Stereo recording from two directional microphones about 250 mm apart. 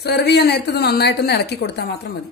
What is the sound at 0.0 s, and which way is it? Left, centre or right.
A woman's voice, left.